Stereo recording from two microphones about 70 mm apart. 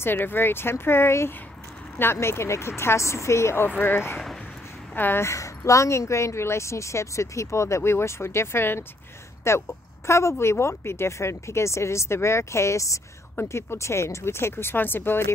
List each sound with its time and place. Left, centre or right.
0.0 s speech: left
5.3 s a woman's voice: left